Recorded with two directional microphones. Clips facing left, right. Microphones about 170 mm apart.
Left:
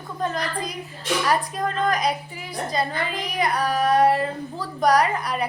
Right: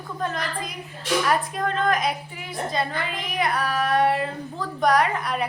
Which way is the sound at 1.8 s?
Centre (ahead or behind).